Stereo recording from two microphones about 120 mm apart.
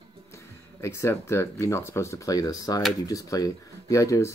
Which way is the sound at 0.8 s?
25° left (ahead or behind).